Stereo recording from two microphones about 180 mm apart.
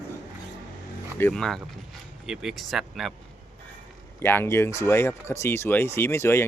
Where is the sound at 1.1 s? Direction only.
10° left (ahead or behind).